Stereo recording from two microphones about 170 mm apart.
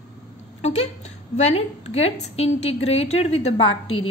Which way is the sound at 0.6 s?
40° left (ahead or behind).